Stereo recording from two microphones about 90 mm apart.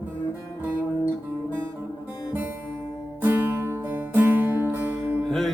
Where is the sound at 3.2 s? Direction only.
25° right (ahead or behind).